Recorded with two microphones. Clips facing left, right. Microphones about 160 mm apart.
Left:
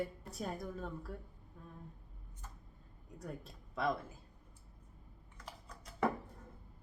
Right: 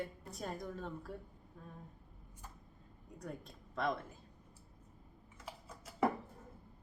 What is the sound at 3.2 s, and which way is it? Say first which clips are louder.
Speech: even; 5° left (ahead or behind).